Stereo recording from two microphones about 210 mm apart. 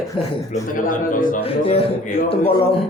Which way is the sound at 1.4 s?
30° left (ahead or behind).